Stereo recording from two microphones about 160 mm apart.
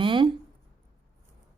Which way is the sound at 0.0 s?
30° right (ahead or behind).